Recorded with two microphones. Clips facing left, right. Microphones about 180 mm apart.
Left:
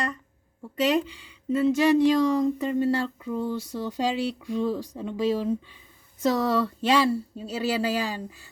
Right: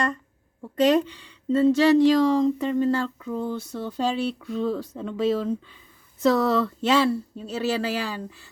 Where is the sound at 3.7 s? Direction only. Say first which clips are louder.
Right 1 dB; 15° left (ahead or behind).